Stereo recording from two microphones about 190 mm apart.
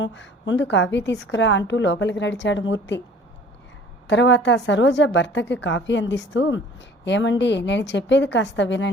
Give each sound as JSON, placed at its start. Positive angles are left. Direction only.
{"t": 0.0, "sound": "a woman's voice", "side_deg": 75}
{"t": 4.0, "sound": "a woman's voice", "side_deg": 70}